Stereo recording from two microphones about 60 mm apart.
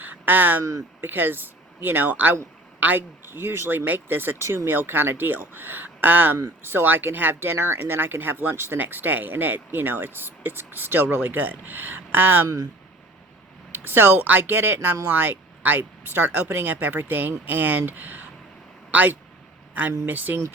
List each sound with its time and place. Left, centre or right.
0.0 s a sound: right
1.0 s speech: right
3.2 s speech: right
13.7 s speech: right